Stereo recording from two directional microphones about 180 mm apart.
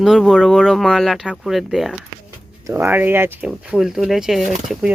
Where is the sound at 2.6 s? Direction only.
15° right (ahead or behind).